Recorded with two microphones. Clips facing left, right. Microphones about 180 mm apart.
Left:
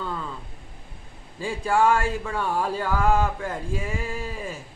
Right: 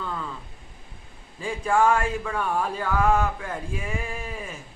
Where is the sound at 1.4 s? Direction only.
30° left (ahead or behind).